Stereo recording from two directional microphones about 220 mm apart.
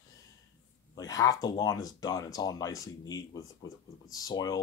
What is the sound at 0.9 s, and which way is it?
Speech, 15° left (ahead or behind).